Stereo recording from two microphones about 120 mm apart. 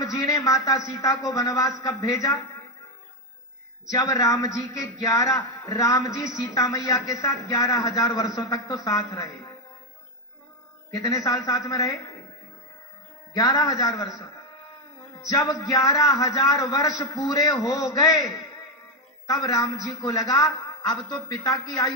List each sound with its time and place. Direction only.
0.0 s a man's voice: 30° left (ahead or behind)
3.9 s a man's voice: 30° left (ahead or behind)
10.9 s a man's voice: 30° left (ahead or behind)
13.3 s a man's voice: 30° left (ahead or behind)